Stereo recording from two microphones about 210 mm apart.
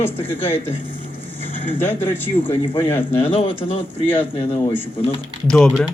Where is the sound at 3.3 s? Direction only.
25° left (ahead or behind).